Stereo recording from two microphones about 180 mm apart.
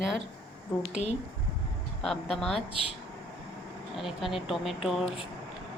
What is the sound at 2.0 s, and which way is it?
Speech, centre (ahead or behind).